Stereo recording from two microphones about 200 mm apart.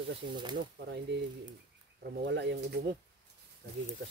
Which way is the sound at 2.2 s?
60° right (ahead or behind).